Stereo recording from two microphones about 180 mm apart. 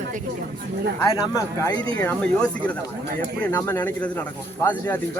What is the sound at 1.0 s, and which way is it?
Speech, 20° left (ahead or behind).